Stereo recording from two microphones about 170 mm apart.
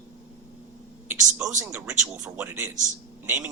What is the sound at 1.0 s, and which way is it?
A man's voice, 15° right (ahead or behind).